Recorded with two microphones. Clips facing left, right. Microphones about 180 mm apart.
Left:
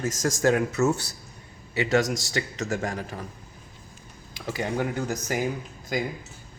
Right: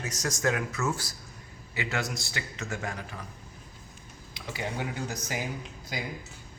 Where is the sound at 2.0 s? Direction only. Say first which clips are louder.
Left 7 dB; 90° left.